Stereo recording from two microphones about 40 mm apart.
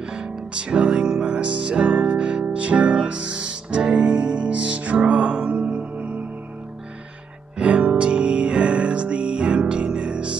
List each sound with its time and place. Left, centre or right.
0.1 s music: right
7.5 s music: right